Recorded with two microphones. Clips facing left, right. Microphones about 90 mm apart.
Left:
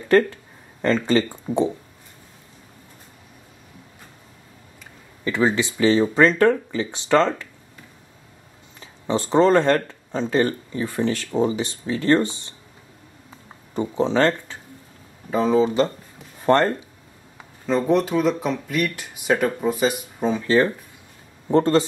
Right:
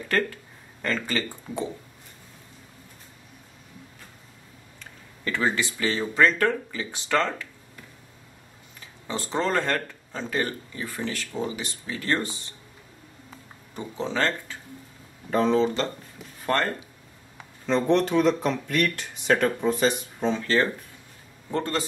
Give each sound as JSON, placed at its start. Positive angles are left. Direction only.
{"t": 0.8, "sound": "speech", "side_deg": 25}
{"t": 5.2, "sound": "speech", "side_deg": 20}
{"t": 8.7, "sound": "speech", "side_deg": 30}
{"t": 13.7, "sound": "speech", "side_deg": 25}
{"t": 15.3, "sound": "speech", "side_deg": 5}
{"t": 16.4, "sound": "speech", "side_deg": 25}
{"t": 17.6, "sound": "speech", "side_deg": 5}
{"t": 21.5, "sound": "speech", "side_deg": 30}